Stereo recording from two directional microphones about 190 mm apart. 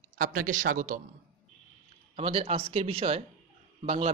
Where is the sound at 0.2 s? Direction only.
45° right (ahead or behind).